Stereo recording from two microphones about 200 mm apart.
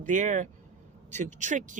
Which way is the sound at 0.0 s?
40° right (ahead or behind).